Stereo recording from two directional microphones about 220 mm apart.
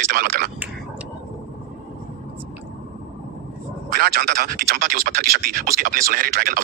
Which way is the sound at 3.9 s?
40° right (ahead or behind).